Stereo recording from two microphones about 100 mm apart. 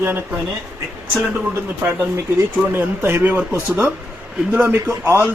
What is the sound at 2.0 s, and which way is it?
Speech, 30° right (ahead or behind).